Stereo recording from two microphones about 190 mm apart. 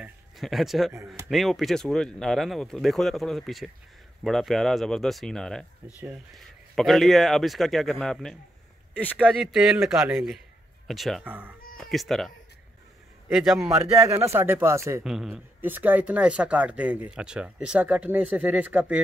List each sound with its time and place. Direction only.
0.0 s speech: centre (ahead or behind)
13.3 s speech: centre (ahead or behind)
14.0 s speech: 15° right (ahead or behind)
15.0 s speech: centre (ahead or behind)